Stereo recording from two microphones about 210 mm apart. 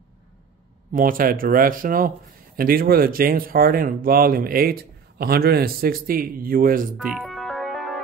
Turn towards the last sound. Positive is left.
turn(degrees=0)  # may be behind; listen again after turning